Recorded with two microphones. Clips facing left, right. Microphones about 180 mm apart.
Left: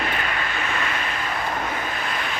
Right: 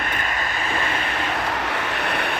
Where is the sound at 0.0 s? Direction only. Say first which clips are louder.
Left 1 dB; 45° right (ahead or behind).